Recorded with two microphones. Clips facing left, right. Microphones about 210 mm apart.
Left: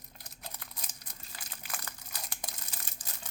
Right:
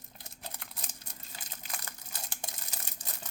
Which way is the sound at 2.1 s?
25° right (ahead or behind).